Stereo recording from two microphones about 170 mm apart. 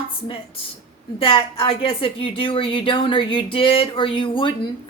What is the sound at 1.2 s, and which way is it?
A woman's voice, 30° left (ahead or behind).